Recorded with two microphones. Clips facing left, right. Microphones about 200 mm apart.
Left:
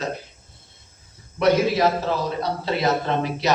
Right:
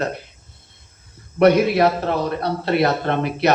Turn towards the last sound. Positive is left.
turn(degrees=-60)  # may be behind; listen again after turning